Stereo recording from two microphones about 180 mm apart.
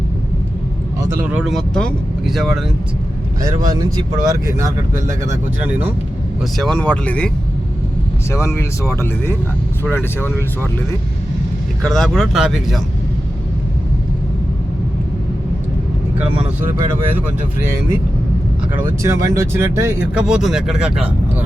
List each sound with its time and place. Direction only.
1.2 s speech: 5° right (ahead or behind)
3.4 s speech: 20° right (ahead or behind)
6.6 s speech: 5° left (ahead or behind)
8.3 s speech: 15° left (ahead or behind)
11.8 s speech: 5° left (ahead or behind)
17.1 s speech: 10° right (ahead or behind)
19.0 s speech: 15° right (ahead or behind)